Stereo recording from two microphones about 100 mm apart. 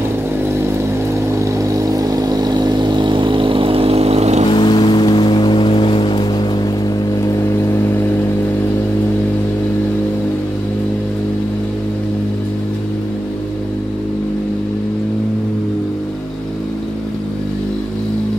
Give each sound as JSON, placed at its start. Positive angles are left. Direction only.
{"t": 1.4, "sound": "vehicle", "side_deg": -35}
{"t": 4.5, "sound": "vehicle", "side_deg": 55}
{"t": 7.2, "sound": "vehicle", "side_deg": 30}